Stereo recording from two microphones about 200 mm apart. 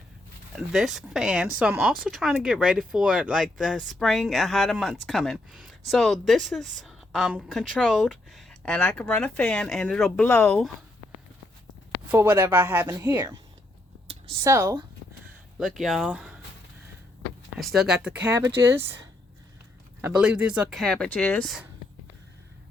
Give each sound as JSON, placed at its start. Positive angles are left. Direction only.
{"t": 0.5, "sound": "speech", "side_deg": 0}
{"t": 12.1, "sound": "speech", "side_deg": -10}
{"t": 14.4, "sound": "speech", "side_deg": -15}
{"t": 15.5, "sound": "speech", "side_deg": 0}
{"t": 17.6, "sound": "speech", "side_deg": 0}
{"t": 20.0, "sound": "speech", "side_deg": -5}